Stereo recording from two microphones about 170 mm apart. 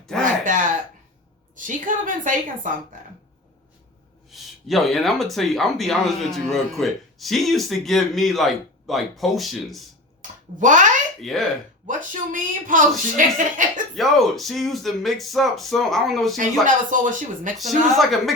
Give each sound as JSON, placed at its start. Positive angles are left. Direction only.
{"t": 0.2, "sound": "a sound", "side_deg": -50}
{"t": 1.5, "sound": "a woman's voice", "side_deg": -50}
{"t": 4.3, "sound": "speech", "side_deg": 0}
{"t": 10.2, "sound": "speech", "side_deg": -50}
{"t": 11.2, "sound": "speech", "side_deg": 0}
{"t": 11.9, "sound": "a woman's voice", "side_deg": -50}
{"t": 13.9, "sound": "speech", "side_deg": 0}
{"t": 16.6, "sound": "a woman's voice", "side_deg": -50}
{"t": 17.6, "sound": "speech", "side_deg": 0}